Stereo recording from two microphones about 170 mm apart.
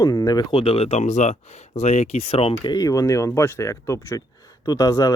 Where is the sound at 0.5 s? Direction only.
35° left (ahead or behind).